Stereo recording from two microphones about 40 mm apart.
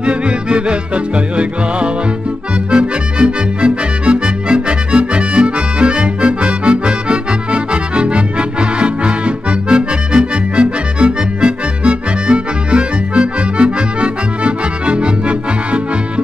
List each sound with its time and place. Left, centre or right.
0.0 s music: right
2.7 s accordion: right